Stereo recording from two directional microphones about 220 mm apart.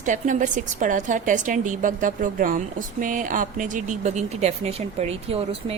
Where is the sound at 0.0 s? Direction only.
35° right (ahead or behind).